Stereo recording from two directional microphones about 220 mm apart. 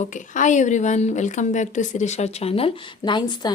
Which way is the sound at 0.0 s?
35° left (ahead or behind).